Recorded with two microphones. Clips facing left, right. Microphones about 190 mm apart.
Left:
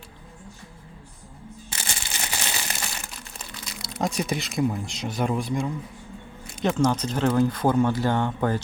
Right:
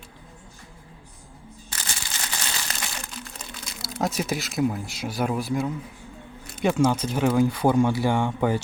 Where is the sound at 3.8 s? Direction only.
5° right (ahead or behind).